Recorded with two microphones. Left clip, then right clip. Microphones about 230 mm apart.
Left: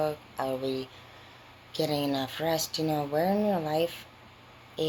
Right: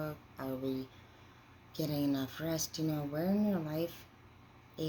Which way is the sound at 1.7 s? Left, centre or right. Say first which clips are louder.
Left 7 dB; centre.